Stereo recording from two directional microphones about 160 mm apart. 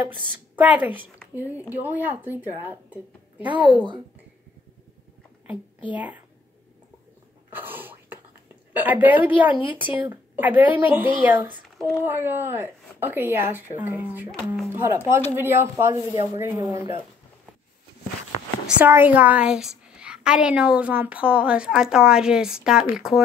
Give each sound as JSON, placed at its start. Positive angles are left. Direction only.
{"t": 0.3, "sound": "a woman's voice", "side_deg": -10}
{"t": 5.5, "sound": "speech", "side_deg": -10}
{"t": 7.5, "sound": "whispering", "side_deg": -10}
{"t": 8.7, "sound": "a woman's voice", "side_deg": -10}
{"t": 18.7, "sound": "a woman's voice", "side_deg": -10}